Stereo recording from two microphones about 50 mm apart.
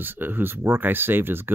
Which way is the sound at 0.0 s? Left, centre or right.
Right.